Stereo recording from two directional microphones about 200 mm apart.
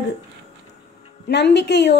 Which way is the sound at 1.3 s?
60° left (ahead or behind).